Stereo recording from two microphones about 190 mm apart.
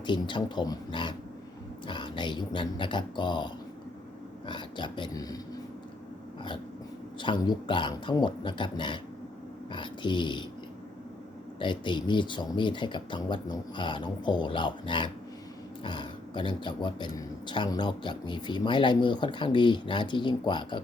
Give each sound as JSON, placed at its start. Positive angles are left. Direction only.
{"t": 0.0, "sound": "a man's voice", "side_deg": 25}
{"t": 7.2, "sound": "a man's voice", "side_deg": 25}
{"t": 11.6, "sound": "a man's voice", "side_deg": 25}